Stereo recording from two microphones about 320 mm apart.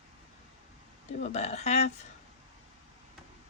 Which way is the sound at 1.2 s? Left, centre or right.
Left.